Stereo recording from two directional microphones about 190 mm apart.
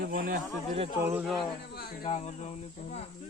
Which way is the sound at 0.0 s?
50° right (ahead or behind).